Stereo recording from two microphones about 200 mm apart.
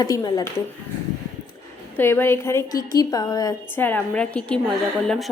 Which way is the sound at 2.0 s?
10° left (ahead or behind).